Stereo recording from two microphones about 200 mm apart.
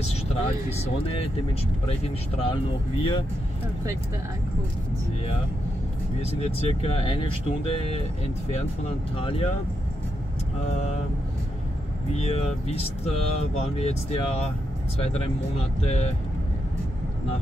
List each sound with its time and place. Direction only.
0.0 s speech: 35° left (ahead or behind)
6.4 s speech: 30° left (ahead or behind)
12.1 s speech: 30° left (ahead or behind)
15.9 s speech: 35° left (ahead or behind)